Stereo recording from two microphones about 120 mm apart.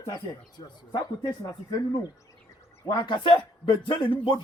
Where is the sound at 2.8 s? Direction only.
35° left (ahead or behind).